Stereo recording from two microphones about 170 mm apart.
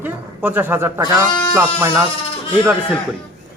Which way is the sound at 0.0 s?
10° right (ahead or behind).